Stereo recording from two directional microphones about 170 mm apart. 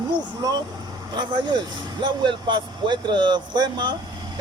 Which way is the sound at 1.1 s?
25° right (ahead or behind).